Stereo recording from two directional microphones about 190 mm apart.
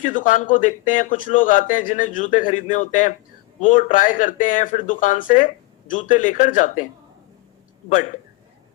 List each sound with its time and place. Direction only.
0.0 s speech: 45° left (ahead or behind)